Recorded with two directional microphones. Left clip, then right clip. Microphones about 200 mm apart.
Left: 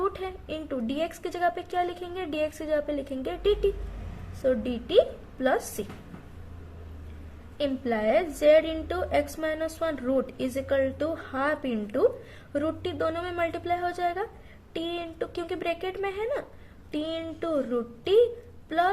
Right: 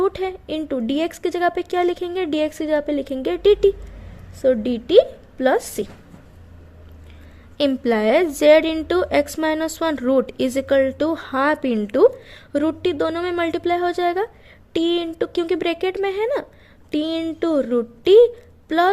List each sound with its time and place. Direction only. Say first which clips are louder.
0.0 s a woman's voice: right 9 dB; 45° right (ahead or behind)
7.6 s a woman's voice: right 9 dB; 55° right (ahead or behind)